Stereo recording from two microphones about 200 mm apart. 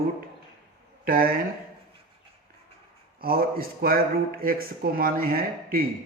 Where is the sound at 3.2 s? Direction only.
50° right (ahead or behind).